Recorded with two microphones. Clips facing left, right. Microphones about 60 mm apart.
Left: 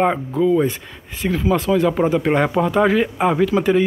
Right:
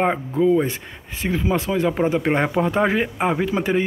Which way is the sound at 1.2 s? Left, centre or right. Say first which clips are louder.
Left 3 dB; right.